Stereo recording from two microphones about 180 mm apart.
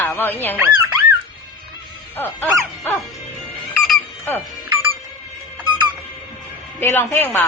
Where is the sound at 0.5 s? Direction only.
15° right (ahead or behind).